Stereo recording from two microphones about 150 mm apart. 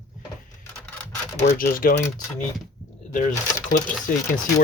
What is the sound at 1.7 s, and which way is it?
Speech, 70° left (ahead or behind).